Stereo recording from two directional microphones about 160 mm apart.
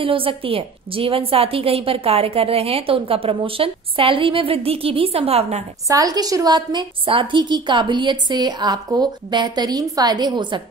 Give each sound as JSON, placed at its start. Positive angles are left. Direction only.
{"t": 0.0, "sound": "a woman's voice", "side_deg": -35}
{"t": 5.9, "sound": "a woman's voice", "side_deg": -25}